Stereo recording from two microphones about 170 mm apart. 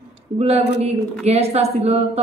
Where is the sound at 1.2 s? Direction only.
35° right (ahead or behind).